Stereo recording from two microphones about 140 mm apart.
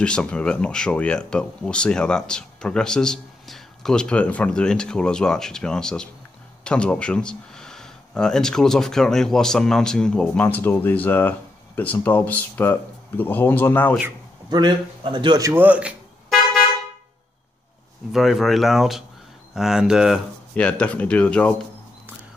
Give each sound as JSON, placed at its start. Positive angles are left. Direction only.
{"t": 0.0, "sound": "speech", "side_deg": 5}
{"t": 14.5, "sound": "a man's voice", "side_deg": -30}
{"t": 15.4, "sound": "speech", "side_deg": -15}
{"t": 18.1, "sound": "speech", "side_deg": 0}
{"t": 20.5, "sound": "speech", "side_deg": 10}